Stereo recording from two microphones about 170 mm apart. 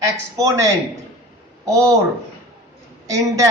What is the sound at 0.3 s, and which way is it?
Speech, 20° right (ahead or behind).